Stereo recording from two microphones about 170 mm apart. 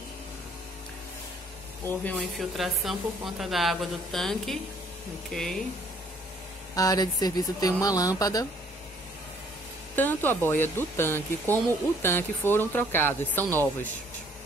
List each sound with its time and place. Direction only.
1.9 s speech: 10° left (ahead or behind)
6.7 s speech: 20° left (ahead or behind)
9.9 s speech: 10° left (ahead or behind)